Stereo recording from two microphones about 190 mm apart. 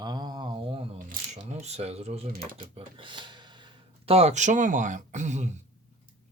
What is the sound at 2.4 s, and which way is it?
Speech, 45° right (ahead or behind).